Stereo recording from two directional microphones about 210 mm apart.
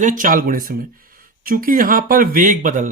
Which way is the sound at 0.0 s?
40° right (ahead or behind).